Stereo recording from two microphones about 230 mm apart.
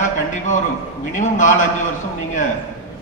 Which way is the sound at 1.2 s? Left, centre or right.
Left.